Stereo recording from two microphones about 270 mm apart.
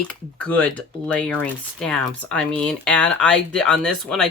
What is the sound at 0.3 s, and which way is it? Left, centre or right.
Speech, centre.